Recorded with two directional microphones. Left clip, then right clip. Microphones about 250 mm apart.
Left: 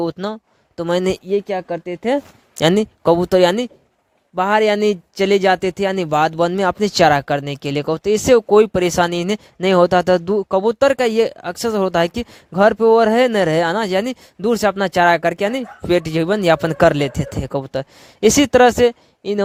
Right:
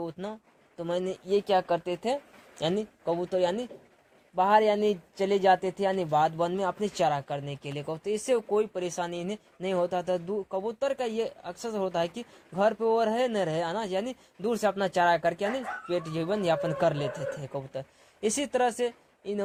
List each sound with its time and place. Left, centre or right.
0.0 s speech: left
2.6 s speech: left